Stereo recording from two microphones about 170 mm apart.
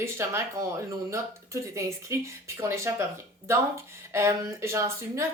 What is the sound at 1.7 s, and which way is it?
A woman's voice, 15° right (ahead or behind).